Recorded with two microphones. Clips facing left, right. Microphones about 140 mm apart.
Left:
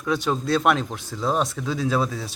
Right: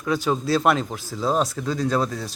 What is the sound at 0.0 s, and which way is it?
Speech, centre (ahead or behind).